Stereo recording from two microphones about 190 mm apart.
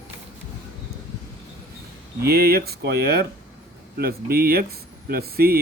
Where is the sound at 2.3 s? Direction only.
55° right (ahead or behind).